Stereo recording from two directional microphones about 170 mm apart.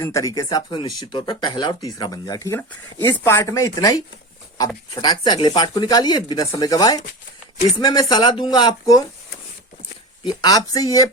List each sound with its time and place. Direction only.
0.0 s speech: 20° left (ahead or behind)
10.4 s speech: 20° left (ahead or behind)